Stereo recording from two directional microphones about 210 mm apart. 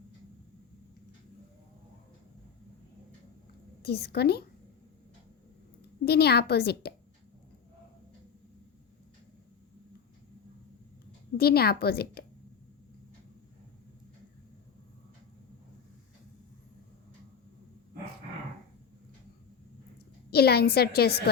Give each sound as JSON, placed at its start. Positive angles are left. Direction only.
{"t": 3.8, "sound": "a woman's voice", "side_deg": 50}
{"t": 6.1, "sound": "a woman's voice", "side_deg": 50}
{"t": 11.3, "sound": "a woman's voice", "side_deg": 50}
{"t": 20.3, "sound": "a woman's voice", "side_deg": 50}